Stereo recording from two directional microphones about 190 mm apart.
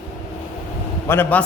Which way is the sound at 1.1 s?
10° left (ahead or behind).